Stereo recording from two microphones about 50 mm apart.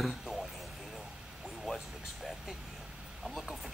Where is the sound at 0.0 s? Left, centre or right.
Centre.